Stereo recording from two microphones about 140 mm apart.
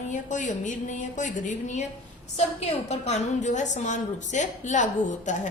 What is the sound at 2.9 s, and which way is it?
A woman's voice, 55° left (ahead or behind).